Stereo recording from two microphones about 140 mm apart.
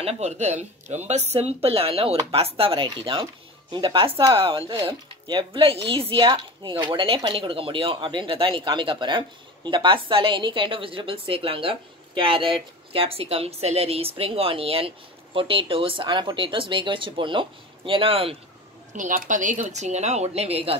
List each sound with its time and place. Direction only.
0.0 s speech: 55° right (ahead or behind)
18.9 s speech: 65° right (ahead or behind); by 20.7 s 45° right (ahead or behind)